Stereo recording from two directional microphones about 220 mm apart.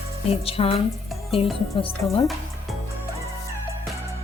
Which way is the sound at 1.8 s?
25° left (ahead or behind).